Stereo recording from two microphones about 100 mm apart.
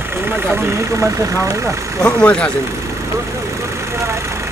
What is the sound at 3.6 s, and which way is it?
Vehicle, 30° right (ahead or behind).